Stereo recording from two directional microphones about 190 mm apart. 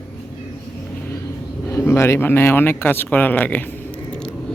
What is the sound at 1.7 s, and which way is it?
Speech, 10° left (ahead or behind).